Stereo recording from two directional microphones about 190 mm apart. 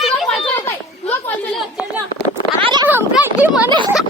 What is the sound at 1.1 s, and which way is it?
Chatter, 10° left (ahead or behind).